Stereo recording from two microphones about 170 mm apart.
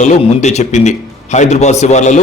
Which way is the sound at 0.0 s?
40° left (ahead or behind).